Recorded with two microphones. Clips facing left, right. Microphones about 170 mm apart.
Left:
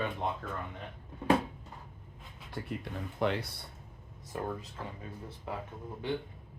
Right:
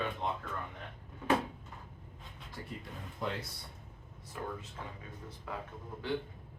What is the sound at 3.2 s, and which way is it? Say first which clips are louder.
Speech: left 7 dB; 70° left (ahead or behind).